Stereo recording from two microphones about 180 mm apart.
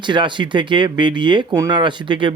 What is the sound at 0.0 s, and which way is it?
Speech, 25° right (ahead or behind).